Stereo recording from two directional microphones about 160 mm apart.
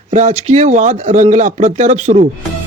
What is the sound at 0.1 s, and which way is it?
Speech, 45° right (ahead or behind).